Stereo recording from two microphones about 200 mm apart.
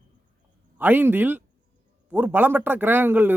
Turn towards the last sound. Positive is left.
turn(degrees=-10)  # may be behind; listen again after turning